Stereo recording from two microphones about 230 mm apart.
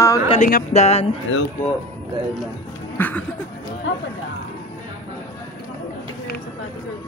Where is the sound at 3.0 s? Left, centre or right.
Centre.